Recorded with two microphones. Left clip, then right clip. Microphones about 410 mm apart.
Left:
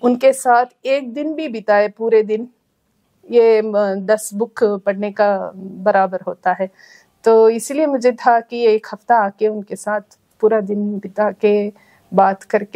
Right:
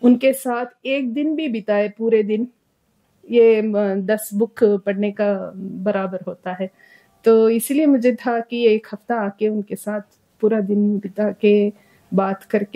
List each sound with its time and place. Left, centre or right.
0.0 s a woman's voice: left